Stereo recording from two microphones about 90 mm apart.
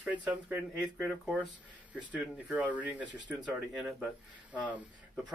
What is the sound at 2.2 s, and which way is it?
Speech, 15° right (ahead or behind).